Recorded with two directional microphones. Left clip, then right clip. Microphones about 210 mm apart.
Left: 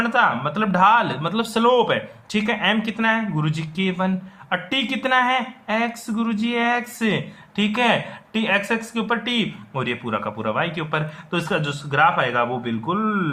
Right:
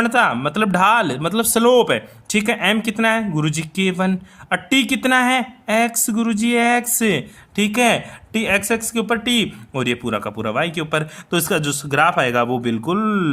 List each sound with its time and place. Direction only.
0.0 s a man's voice: 50° right (ahead or behind)